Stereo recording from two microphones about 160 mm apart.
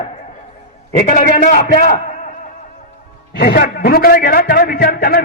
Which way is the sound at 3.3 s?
70° left (ahead or behind).